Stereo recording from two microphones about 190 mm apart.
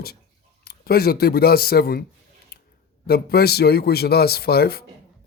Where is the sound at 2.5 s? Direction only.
55° left (ahead or behind).